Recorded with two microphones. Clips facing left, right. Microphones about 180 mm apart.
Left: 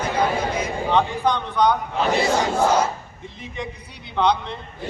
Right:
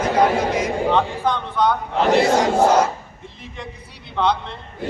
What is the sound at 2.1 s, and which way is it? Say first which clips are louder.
Choir: right 5 dB; 70° right (ahead or behind).